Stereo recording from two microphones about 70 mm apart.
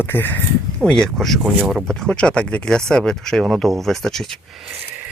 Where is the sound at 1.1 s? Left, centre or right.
Centre.